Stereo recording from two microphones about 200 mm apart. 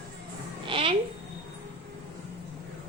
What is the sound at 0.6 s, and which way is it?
Speech, 25° right (ahead or behind).